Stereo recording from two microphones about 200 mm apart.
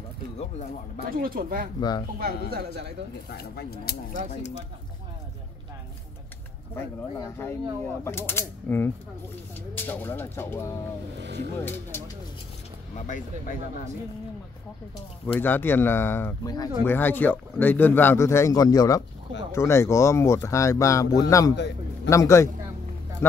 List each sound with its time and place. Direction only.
1.1 s a man's voice: 45° right (ahead or behind)
1.8 s speech: 20° left (ahead or behind)
2.1 s a man's voice: 50° right (ahead or behind)
3.3 s speech: 50° left (ahead or behind)
4.3 s speech: 35° left (ahead or behind)
8.0 s speech: 10° left (ahead or behind)
11.1 s speech: 60° right (ahead or behind)
11.6 s speech: 10° left (ahead or behind)
12.9 s speech: 40° left (ahead or behind)
15.3 s speech: 10° left (ahead or behind)
21.5 s a man's voice: 60° left (ahead or behind)
22.1 s speech: 15° left (ahead or behind)